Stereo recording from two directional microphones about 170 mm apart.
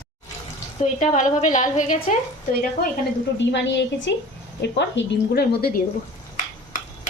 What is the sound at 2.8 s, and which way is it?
Speech, 70° left (ahead or behind).